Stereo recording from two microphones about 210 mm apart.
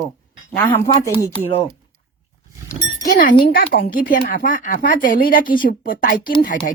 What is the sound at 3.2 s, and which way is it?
Speech, 40° left (ahead or behind).